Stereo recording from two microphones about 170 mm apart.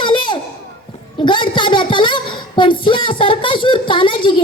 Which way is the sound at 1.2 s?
30° left (ahead or behind).